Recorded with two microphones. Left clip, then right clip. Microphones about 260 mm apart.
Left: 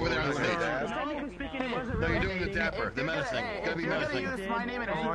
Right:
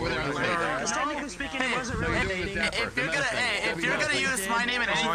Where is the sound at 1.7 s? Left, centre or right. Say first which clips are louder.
Right 3 dB; right.